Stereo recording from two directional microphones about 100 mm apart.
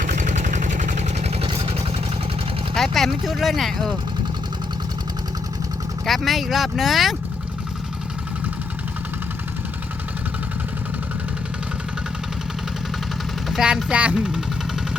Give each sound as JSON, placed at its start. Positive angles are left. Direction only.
{"t": 1.5, "sound": "vehicle", "side_deg": -70}
{"t": 2.7, "sound": "speech", "side_deg": 5}
{"t": 6.1, "sound": "speech", "side_deg": 0}
{"t": 13.5, "sound": "speech", "side_deg": -5}